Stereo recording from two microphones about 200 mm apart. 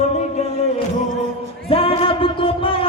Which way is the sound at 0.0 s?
35° left (ahead or behind).